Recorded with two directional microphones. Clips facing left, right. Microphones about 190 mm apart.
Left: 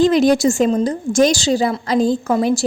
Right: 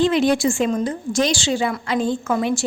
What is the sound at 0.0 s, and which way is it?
A woman's voice, 40° left (ahead or behind).